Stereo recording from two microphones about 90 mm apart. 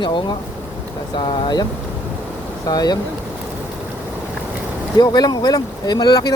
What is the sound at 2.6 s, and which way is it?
Speech, 45° left (ahead or behind).